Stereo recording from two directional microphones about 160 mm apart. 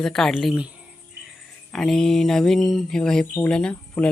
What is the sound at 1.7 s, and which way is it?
Speech, 5° left (ahead or behind).